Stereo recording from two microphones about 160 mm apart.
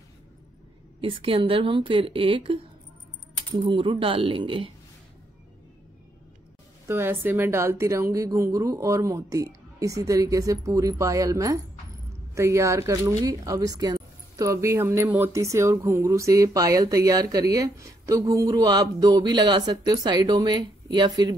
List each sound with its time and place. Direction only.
1.0 s speech: 35° right (ahead or behind)
6.9 s speech: 15° right (ahead or behind)